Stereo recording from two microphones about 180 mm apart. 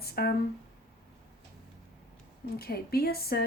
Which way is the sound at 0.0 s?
60° left (ahead or behind).